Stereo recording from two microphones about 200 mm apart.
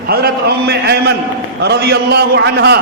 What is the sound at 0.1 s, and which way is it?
A man's voice, 55° right (ahead or behind).